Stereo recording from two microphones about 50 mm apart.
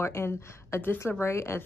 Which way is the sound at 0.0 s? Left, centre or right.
Left.